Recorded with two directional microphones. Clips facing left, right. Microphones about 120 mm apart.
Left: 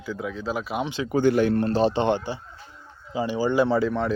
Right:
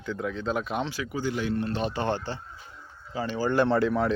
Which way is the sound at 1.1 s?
55° left (ahead or behind).